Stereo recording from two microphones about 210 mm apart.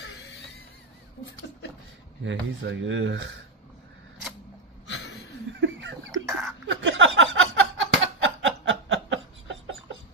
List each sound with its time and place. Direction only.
0.0 s music: 55° left (ahead or behind)
2.2 s speech: 60° right (ahead or behind)
5.6 s a sound: 60° right (ahead or behind)
6.1 s throat clearing: 15° right (ahead or behind)
6.7 s a sound: 60° right (ahead or behind)
7.3 s snicker: 65° right (ahead or behind)